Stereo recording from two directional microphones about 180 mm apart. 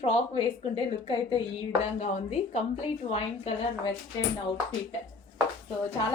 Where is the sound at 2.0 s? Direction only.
35° left (ahead or behind).